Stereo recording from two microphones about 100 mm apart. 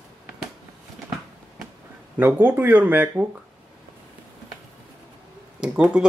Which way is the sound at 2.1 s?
20° right (ahead or behind).